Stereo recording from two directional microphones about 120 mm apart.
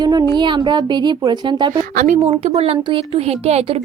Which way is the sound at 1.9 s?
85° right.